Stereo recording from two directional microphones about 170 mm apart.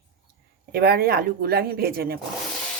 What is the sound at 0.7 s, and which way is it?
Speech, 65° right (ahead or behind).